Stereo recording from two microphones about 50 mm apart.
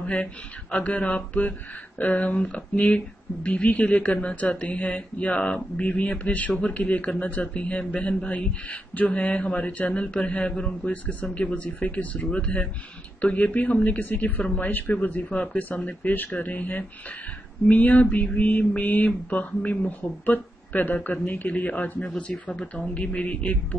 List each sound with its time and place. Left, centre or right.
0.0 s speech: left
10.9 s speech: left
22.5 s speech: centre